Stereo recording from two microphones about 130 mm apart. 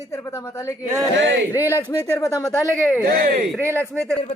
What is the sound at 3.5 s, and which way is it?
Speech, 20° right (ahead or behind).